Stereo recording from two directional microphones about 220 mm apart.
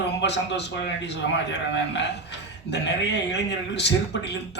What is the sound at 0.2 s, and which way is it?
Speech, 50° left (ahead or behind).